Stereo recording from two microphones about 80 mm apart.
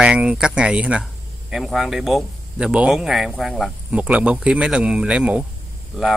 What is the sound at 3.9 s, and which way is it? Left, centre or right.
Speech, centre.